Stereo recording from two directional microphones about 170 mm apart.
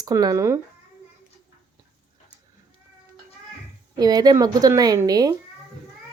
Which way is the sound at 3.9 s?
25° right (ahead or behind).